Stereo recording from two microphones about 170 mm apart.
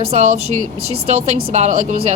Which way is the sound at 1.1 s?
40° right (ahead or behind).